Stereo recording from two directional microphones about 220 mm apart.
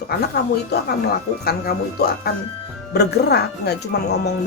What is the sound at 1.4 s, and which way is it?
Speech, 45° left (ahead or behind).